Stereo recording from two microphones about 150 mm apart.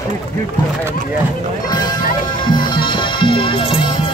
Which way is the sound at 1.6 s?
25° left (ahead or behind).